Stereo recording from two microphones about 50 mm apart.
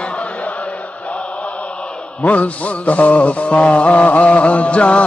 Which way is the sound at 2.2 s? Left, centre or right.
Left.